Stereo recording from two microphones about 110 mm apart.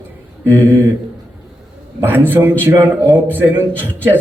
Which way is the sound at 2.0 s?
20° right (ahead or behind).